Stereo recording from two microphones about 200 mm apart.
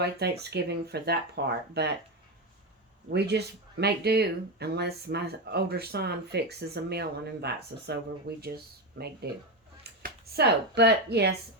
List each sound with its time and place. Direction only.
0.0 s speech: 55° right (ahead or behind)
3.1 s speech: 55° right (ahead or behind)